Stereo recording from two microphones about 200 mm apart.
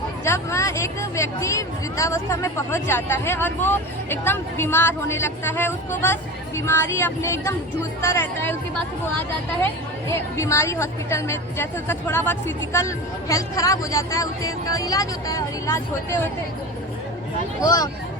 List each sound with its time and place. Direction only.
0.3 s a woman's voice: 15° left (ahead or behind)
10.1 s a woman's voice: 15° left (ahead or behind)
17.6 s a woman's voice: 20° left (ahead or behind)